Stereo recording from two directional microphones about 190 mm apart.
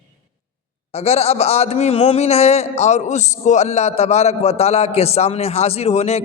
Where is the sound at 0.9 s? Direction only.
35° left (ahead or behind).